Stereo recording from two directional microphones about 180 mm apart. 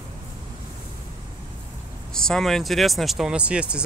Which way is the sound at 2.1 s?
5° left (ahead or behind).